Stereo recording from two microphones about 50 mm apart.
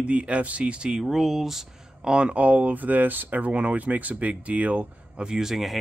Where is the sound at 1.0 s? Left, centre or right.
Centre; by 4.9 s right.